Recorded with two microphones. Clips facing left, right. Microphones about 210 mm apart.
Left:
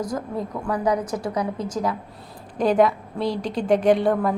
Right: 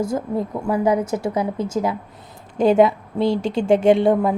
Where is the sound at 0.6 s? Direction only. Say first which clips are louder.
Right 4 dB; 25° right (ahead or behind).